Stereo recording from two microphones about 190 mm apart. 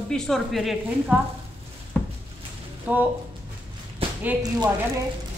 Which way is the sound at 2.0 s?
5° left (ahead or behind).